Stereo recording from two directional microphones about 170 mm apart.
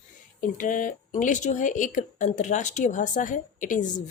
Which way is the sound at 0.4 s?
50° left (ahead or behind).